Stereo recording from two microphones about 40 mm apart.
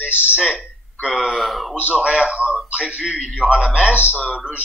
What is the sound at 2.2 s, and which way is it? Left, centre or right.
A man's voice, right.